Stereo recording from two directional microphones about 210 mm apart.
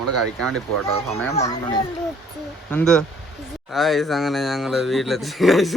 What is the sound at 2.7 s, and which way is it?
Speech, 5° left (ahead or behind).